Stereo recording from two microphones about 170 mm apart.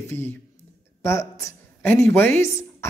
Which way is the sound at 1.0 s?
15° left (ahead or behind).